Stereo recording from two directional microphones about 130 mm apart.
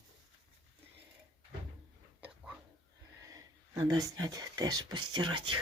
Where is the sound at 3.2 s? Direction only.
25° right (ahead or behind).